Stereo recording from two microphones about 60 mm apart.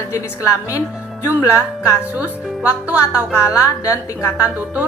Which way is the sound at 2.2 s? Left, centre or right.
Right.